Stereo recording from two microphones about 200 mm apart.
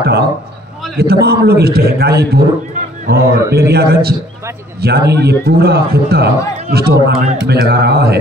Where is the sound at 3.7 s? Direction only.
50° right (ahead or behind).